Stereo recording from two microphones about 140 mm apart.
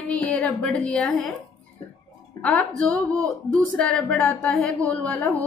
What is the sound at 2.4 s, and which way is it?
A woman's voice, 10° left (ahead or behind).